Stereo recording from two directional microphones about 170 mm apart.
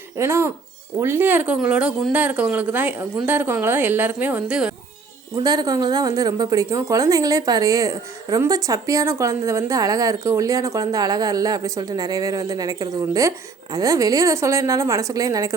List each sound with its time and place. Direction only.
0.2 s a woman's voice: 15° right (ahead or behind)
5.4 s a woman's voice: 25° right (ahead or behind)